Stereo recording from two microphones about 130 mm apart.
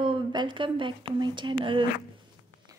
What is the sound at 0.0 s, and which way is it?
Speech, 40° right (ahead or behind).